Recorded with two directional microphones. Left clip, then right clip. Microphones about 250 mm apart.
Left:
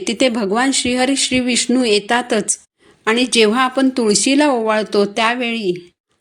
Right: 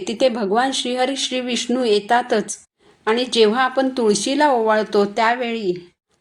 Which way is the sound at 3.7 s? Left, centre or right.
Left.